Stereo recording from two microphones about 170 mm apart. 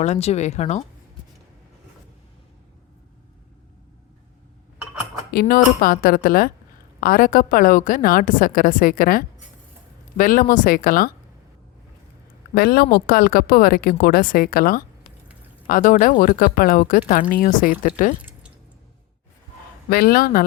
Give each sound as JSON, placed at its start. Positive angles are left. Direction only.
{"t": 0.0, "sound": "speech", "side_deg": 40}
{"t": 5.3, "sound": "speech", "side_deg": 60}
{"t": 12.5, "sound": "speech", "side_deg": 60}
{"t": 18.2, "sound": "drip", "side_deg": -10}
{"t": 19.9, "sound": "speech", "side_deg": 65}